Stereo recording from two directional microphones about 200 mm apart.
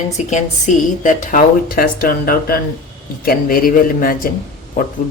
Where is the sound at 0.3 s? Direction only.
35° left (ahead or behind).